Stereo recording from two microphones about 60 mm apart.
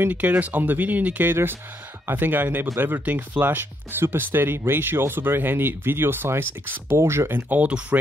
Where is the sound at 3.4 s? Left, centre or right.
Right.